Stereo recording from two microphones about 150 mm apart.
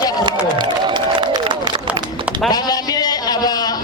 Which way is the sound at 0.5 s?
30° right (ahead or behind).